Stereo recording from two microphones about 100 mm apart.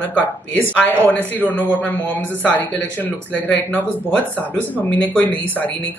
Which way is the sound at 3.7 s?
20° left (ahead or behind).